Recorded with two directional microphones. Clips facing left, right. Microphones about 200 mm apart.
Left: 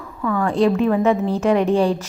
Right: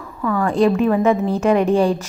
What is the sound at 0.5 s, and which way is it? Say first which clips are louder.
Speech: right 1 dB; 50° right (ahead or behind).